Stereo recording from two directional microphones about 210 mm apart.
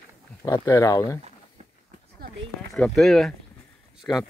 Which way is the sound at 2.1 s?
45° right (ahead or behind).